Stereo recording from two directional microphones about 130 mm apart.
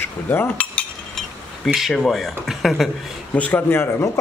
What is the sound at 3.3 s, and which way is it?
Speech, 10° left (ahead or behind).